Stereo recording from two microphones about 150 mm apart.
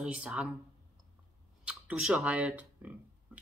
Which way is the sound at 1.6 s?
5° right (ahead or behind).